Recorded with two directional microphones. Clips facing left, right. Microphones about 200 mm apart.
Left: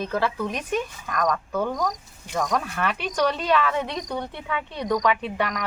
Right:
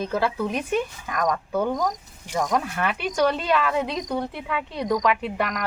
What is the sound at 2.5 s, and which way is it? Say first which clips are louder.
Speech: right 2 dB; 5° right (ahead or behind).